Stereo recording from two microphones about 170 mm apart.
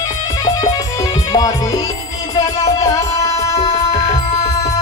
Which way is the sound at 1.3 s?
20° left (ahead or behind).